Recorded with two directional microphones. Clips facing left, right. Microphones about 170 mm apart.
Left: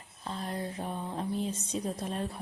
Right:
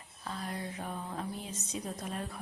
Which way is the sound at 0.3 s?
30° left (ahead or behind).